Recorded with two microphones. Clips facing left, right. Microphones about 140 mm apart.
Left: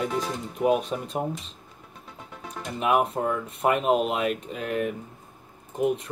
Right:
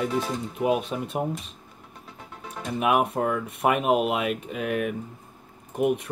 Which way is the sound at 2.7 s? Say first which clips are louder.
Right 1 dB; 10° right (ahead or behind).